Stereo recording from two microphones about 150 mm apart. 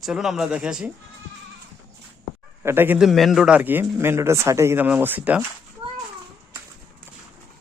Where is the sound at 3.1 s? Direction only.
Centre (ahead or behind).